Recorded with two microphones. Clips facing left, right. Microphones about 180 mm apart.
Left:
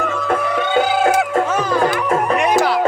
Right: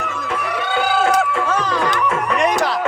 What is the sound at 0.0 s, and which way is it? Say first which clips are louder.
Music: left 6 dB; 50° left (ahead or behind).